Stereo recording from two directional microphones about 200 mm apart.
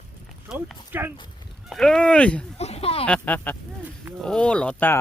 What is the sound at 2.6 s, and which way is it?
Speech, 30° left (ahead or behind).